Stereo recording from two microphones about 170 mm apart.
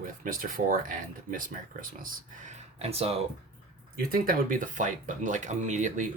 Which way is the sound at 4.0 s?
55° right (ahead or behind).